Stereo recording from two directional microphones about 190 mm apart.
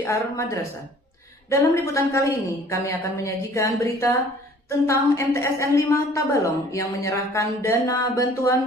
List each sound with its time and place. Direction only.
0.0 s a woman's voice: 15° left (ahead or behind)